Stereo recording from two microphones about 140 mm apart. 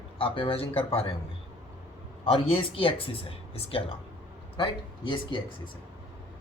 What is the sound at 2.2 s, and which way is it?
Speech, 40° left (ahead or behind).